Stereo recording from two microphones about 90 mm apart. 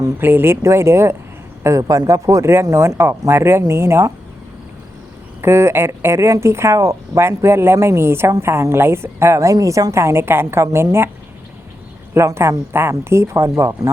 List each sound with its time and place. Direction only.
0.2 s speech: 25° right (ahead or behind)
5.4 s speech: 30° right (ahead or behind)
12.1 s speech: 30° right (ahead or behind)